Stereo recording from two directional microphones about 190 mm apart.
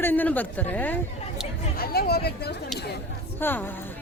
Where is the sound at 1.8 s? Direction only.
55° left (ahead or behind).